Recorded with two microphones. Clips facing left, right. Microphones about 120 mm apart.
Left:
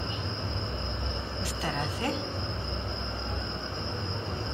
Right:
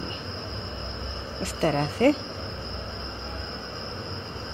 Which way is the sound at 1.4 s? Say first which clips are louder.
Right 10 dB; 55° right (ahead or behind).